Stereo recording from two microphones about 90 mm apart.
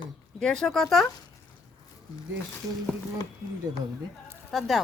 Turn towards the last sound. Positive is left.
turn(degrees=0)  # may be behind; listen again after turning